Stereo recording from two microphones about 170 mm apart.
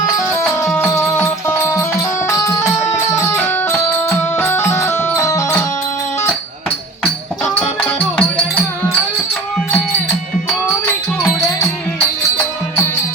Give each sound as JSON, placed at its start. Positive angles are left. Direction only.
{"t": 0.2, "sound": "music", "side_deg": 15}
{"t": 7.4, "sound": "music", "side_deg": 15}